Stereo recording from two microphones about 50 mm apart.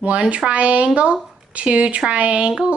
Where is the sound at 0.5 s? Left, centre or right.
Right.